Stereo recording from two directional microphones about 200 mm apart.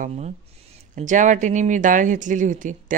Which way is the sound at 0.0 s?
35° right (ahead or behind).